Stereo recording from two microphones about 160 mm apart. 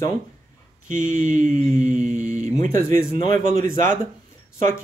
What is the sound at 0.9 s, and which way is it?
Speech, 55° right (ahead or behind).